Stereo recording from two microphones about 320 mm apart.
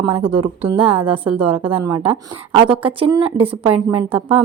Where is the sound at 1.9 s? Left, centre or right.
Centre.